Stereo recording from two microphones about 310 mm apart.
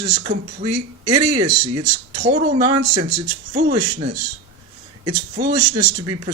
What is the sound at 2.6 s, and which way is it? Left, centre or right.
Speech, centre.